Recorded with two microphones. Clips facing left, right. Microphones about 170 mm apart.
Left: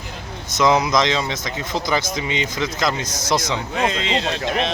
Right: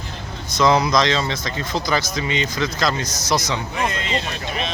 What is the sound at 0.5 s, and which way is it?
Speech, 15° left (ahead or behind).